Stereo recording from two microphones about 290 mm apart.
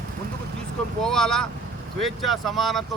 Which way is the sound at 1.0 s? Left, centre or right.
Centre.